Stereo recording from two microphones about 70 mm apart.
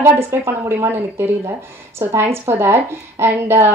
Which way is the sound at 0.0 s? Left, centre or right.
Right.